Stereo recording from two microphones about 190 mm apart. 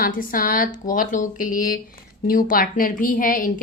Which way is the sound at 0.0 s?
50° left (ahead or behind).